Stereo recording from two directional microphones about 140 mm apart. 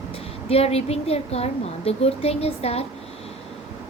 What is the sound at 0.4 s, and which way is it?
Speech, 45° left (ahead or behind).